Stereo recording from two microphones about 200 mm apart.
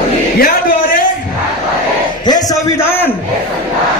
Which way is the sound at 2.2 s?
20° left (ahead or behind).